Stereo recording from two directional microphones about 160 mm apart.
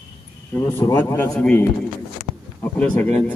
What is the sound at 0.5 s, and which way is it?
Speech, 15° left (ahead or behind).